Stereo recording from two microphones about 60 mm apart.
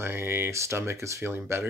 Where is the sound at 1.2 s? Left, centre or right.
Right.